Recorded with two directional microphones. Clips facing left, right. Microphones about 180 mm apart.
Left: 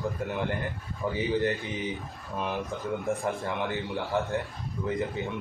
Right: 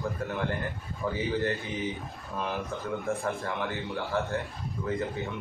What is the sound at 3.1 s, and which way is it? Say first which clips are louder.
A man's voice: left 1 dB; 15° left (ahead or behind).